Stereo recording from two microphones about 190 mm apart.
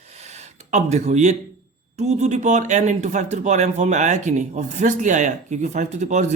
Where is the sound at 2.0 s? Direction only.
35° right (ahead or behind).